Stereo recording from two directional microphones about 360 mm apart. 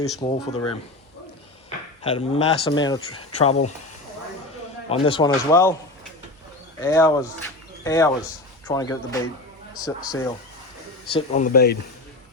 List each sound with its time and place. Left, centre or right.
0.2 s speech: centre
2.0 s speech: centre
4.9 s speech: centre
6.8 s speech: centre; by 11.8 s left